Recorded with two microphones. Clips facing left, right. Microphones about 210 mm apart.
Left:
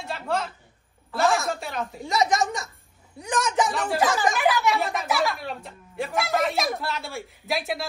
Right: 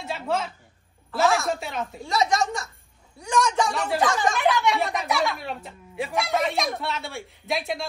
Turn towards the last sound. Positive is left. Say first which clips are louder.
# even
turn(degrees=0)  # may be behind; listen again after turning